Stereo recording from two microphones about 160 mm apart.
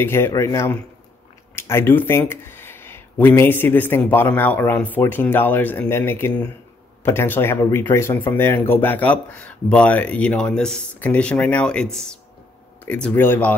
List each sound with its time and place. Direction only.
0.0 s speech: 15° left (ahead or behind)